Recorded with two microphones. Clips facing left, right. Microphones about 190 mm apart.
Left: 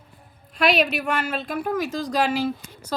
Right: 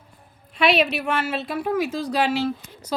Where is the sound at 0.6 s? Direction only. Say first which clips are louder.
Right 1 dB; centre (ahead or behind).